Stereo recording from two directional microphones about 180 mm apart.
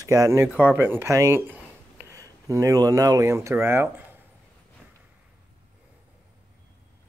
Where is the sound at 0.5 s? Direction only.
10° left (ahead or behind).